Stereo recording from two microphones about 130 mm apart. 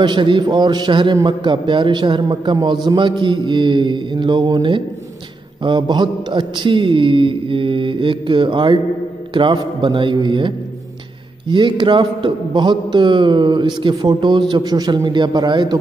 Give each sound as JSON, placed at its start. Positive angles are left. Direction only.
{"t": 0.0, "sound": "a man's voice", "side_deg": -35}